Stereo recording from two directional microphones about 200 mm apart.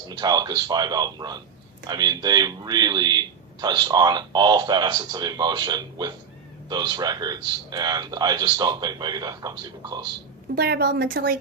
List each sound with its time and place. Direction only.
0.1 s a man's voice: 20° right (ahead or behind)
10.5 s a woman's voice: 55° right (ahead or behind)